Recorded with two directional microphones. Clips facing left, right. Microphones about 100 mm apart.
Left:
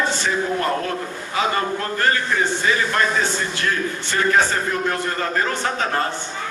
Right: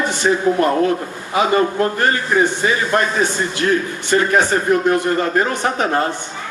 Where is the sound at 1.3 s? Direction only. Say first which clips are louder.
Right 6 dB; 20° right (ahead or behind).